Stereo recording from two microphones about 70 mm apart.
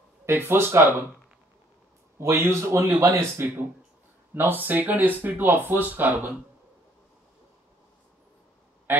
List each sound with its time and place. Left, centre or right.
0.2 s speech: right
2.1 s speech: right